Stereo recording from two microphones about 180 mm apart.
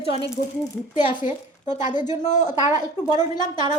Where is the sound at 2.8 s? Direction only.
20° left (ahead or behind).